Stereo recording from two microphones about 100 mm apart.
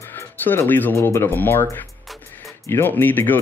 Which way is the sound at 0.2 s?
25° left (ahead or behind).